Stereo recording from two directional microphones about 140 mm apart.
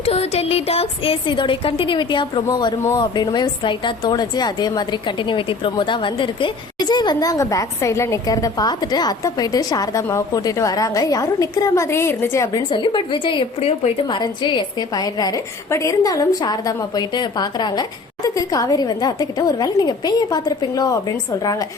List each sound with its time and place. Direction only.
0.0 s a woman's voice: 45° left (ahead or behind); by 12.6 s 20° left (ahead or behind)
12.7 s a woman's voice: 35° left (ahead or behind)